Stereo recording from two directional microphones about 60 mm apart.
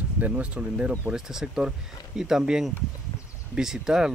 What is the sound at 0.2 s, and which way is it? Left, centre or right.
Speech, right.